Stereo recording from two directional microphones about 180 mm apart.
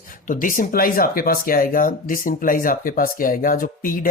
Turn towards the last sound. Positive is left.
turn(degrees=50)  # may be behind; listen again after turning